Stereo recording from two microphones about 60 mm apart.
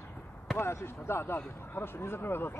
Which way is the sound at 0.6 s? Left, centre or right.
Left.